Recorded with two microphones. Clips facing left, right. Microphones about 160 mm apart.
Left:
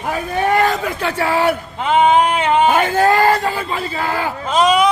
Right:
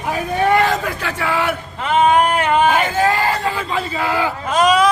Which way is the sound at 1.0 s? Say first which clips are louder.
Left 4 dB; 30° left (ahead or behind).